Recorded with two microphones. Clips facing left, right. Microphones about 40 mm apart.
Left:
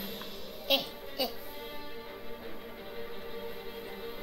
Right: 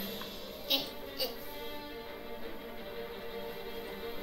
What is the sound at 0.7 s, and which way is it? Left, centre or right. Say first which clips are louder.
Speech: left 5 dB; centre.